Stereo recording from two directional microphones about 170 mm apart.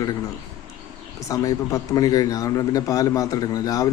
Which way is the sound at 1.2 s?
20° left (ahead or behind).